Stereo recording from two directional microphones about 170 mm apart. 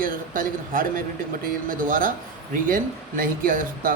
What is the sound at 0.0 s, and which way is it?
Speech, 55° right (ahead or behind).